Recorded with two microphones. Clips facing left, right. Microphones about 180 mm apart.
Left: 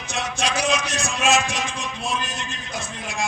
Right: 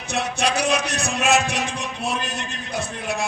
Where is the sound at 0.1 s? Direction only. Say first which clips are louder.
Right 3 dB; 60° right (ahead or behind).